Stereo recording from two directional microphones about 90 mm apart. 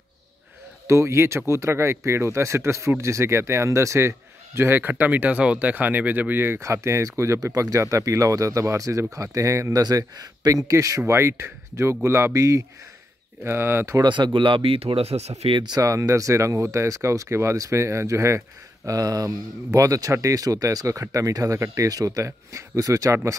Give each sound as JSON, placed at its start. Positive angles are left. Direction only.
{"t": 0.8, "sound": "speech", "side_deg": -30}
{"t": 14.0, "sound": "speech", "side_deg": -60}
{"t": 15.6, "sound": "speech", "side_deg": -45}